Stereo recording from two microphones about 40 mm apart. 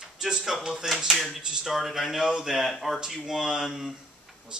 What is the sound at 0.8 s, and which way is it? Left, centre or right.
Speech, centre.